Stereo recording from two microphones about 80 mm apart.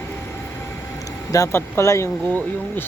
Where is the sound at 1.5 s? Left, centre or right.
Left.